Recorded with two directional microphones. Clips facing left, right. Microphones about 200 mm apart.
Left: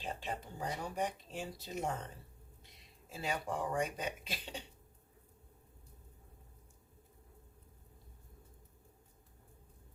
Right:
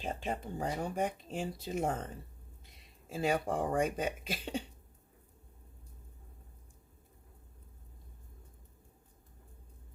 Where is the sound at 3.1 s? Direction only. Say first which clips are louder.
Right 7 dB; 50° right (ahead or behind).